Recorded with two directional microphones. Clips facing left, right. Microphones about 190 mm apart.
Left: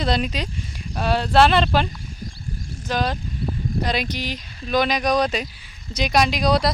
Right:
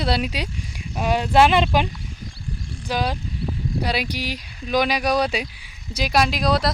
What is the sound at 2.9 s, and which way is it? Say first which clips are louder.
Speech: left 1 dB; 10° right (ahead or behind).